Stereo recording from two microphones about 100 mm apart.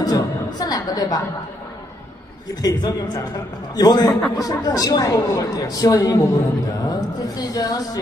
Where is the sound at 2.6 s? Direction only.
40° left (ahead or behind).